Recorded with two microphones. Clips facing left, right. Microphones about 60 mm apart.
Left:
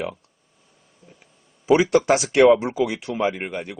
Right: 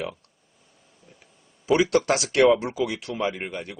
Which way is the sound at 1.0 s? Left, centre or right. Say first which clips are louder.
Left 3 dB; centre.